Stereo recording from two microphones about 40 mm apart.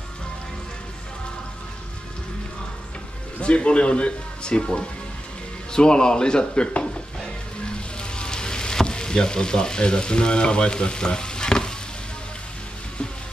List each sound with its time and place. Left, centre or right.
3.3 s speech: left
7.6 s frying: left